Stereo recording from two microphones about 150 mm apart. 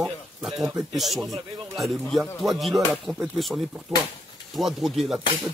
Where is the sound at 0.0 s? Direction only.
5° right (ahead or behind).